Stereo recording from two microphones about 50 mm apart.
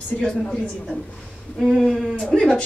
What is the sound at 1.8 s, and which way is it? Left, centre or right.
Speech, centre.